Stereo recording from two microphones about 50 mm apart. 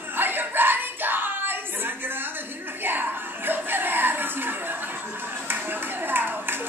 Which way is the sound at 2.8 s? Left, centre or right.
Right.